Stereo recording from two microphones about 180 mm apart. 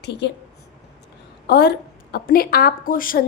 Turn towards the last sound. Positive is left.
turn(degrees=50)  # may be behind; listen again after turning